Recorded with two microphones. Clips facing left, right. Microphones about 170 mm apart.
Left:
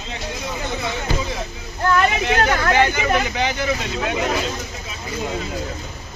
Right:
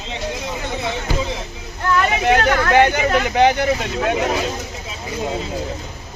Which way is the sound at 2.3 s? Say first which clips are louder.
Right 3 dB; 55° right (ahead or behind).